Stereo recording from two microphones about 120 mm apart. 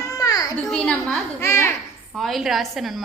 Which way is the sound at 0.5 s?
5° left (ahead or behind).